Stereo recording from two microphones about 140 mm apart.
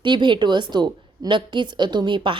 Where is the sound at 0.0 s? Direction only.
35° right (ahead or behind).